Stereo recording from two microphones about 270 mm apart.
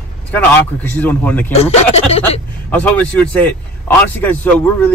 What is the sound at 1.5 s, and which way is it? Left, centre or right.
Speech, left.